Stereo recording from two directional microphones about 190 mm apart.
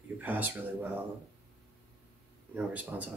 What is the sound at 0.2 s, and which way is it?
Speech, 10° right (ahead or behind).